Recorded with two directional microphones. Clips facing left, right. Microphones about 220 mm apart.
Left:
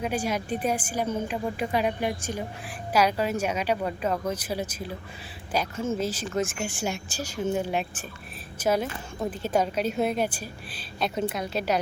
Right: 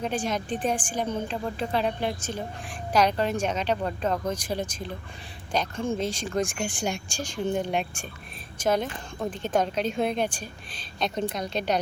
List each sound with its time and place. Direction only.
0.0 s a woman's voice: 10° left (ahead or behind)